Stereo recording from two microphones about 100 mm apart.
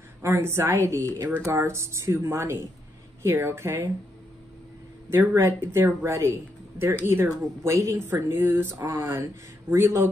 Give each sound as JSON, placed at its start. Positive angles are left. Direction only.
{"t": 0.2, "sound": "speech", "side_deg": -25}
{"t": 5.1, "sound": "speech", "side_deg": -25}